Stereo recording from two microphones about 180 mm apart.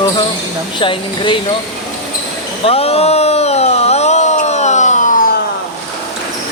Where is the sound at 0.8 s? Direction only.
25° left (ahead or behind).